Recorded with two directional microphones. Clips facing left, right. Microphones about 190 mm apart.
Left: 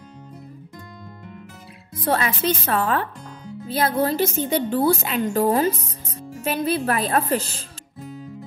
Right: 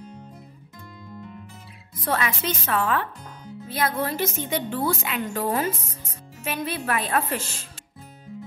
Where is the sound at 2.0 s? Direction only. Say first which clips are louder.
Left 4 dB; 35° left (ahead or behind).